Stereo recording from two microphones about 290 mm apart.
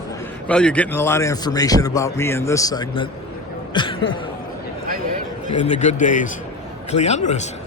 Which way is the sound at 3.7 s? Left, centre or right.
Centre.